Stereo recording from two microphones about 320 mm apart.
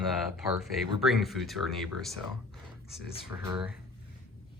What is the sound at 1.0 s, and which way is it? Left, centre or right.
Speech, centre.